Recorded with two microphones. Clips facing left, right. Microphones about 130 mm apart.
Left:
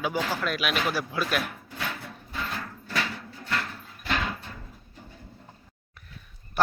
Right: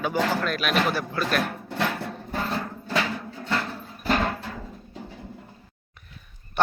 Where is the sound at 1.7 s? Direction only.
80° right.